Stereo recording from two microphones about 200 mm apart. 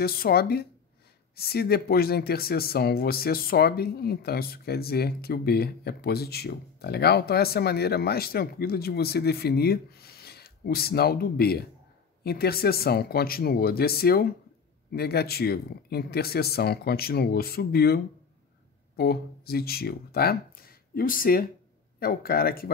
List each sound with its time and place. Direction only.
0.0 s speech: 50° left (ahead or behind)